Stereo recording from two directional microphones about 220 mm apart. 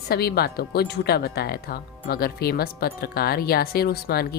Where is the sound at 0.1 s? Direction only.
45° left (ahead or behind).